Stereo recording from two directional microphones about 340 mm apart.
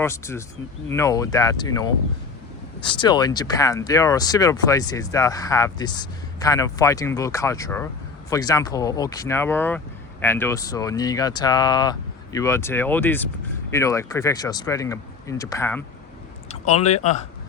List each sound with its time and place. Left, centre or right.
0.0 s speech: centre
16.6 s speech: centre